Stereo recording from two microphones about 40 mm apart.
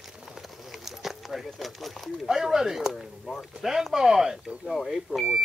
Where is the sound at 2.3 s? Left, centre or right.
Centre.